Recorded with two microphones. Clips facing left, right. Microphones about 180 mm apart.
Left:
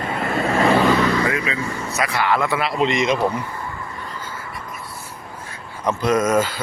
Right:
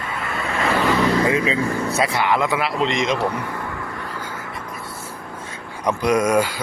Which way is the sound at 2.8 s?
5° left (ahead or behind).